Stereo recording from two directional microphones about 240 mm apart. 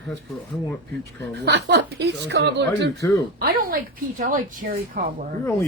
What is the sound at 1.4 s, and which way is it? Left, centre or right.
Speech, right.